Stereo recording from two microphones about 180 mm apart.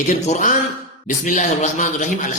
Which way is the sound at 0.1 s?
45° left (ahead or behind).